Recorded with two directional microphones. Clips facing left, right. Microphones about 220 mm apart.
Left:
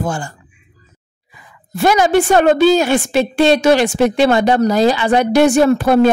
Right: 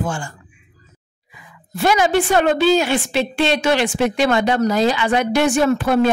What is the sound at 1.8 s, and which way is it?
A woman's voice, 45° left (ahead or behind).